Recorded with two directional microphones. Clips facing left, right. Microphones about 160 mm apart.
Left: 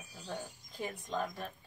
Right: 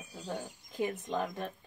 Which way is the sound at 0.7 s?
20° right (ahead or behind).